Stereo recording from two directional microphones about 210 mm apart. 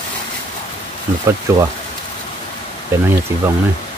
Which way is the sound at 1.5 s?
15° right (ahead or behind).